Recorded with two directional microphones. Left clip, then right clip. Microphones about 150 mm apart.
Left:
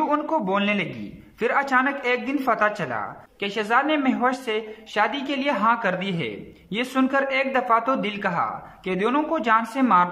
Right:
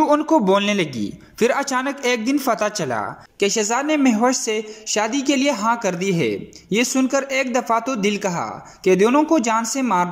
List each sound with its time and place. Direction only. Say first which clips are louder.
0.0 s a man's voice: right 6 dB; 20° right (ahead or behind)